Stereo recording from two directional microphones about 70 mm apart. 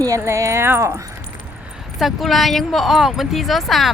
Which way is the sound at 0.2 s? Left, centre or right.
Right.